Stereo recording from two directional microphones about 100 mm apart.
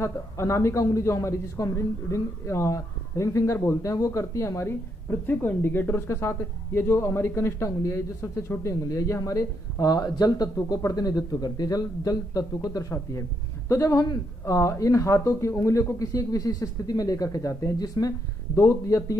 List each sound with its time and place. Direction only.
0.0 s a man's voice: 25° left (ahead or behind)